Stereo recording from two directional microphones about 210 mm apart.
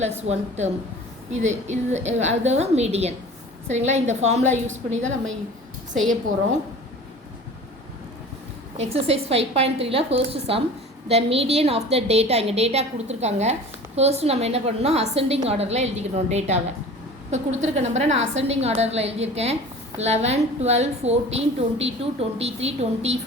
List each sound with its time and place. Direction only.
0.0 s a woman's voice: 30° right (ahead or behind)
8.8 s a woman's voice: 30° right (ahead or behind)